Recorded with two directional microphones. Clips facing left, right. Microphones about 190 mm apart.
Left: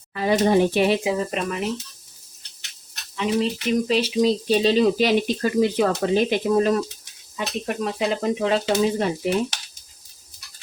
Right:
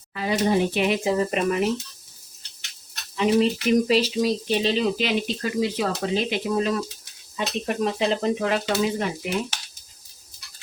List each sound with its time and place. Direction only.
0.1 s speech: 45° left (ahead or behind)
1.0 s speech: centre (ahead or behind)
3.2 s a sound: 15° right (ahead or behind)
4.1 s speech: 25° left (ahead or behind)
4.6 s speech: 40° left (ahead or behind)
7.3 s speech: 5° left (ahead or behind)
8.4 s speech: 25° left (ahead or behind)